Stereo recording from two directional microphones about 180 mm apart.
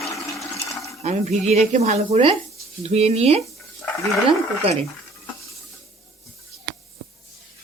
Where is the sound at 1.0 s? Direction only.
40° right (ahead or behind).